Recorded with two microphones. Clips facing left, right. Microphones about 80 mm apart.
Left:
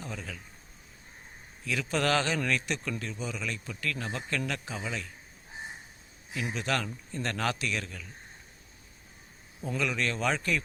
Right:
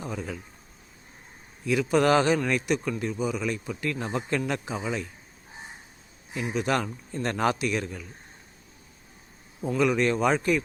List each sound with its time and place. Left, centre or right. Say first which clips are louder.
0.0 s a man's voice: right 6 dB; centre
1.6 s a man's voice: right 7 dB; centre
6.4 s a man's voice: right 5 dB; centre
9.6 s a man's voice: right 8 dB; centre